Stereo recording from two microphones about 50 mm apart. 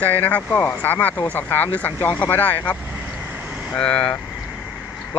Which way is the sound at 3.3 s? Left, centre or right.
Right.